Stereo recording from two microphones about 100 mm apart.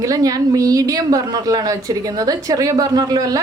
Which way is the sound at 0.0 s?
35° right (ahead or behind).